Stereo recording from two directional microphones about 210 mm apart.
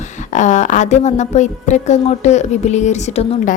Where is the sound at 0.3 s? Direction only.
35° left (ahead or behind).